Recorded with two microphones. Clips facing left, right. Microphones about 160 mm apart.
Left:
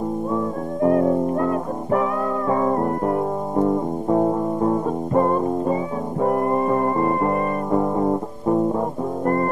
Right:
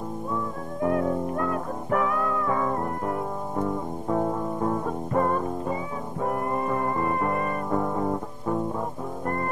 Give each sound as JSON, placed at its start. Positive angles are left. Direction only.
{"t": 0.8, "sound": "music", "side_deg": 30}
{"t": 9.2, "sound": "music", "side_deg": 40}